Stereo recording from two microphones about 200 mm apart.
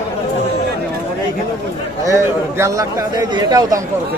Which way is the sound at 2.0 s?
15° right (ahead or behind).